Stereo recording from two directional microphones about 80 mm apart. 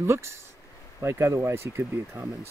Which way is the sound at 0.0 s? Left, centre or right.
Right.